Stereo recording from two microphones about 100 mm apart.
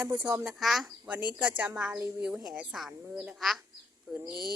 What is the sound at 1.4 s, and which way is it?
A woman's voice, 10° right (ahead or behind).